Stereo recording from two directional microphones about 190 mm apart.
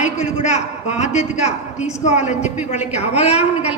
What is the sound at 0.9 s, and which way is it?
A woman's voice, 35° left (ahead or behind).